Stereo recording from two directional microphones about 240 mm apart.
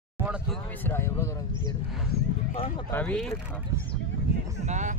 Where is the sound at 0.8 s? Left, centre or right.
Centre.